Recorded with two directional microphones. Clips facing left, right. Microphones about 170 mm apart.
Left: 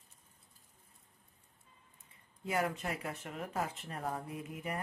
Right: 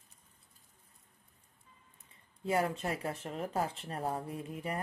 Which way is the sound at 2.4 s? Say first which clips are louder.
Right 3 dB; 30° right (ahead or behind).